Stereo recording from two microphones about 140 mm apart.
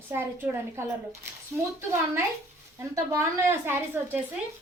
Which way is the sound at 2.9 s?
25° right (ahead or behind).